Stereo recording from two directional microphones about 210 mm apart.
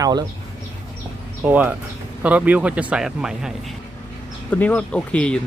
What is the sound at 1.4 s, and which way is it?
Speech, 10° right (ahead or behind).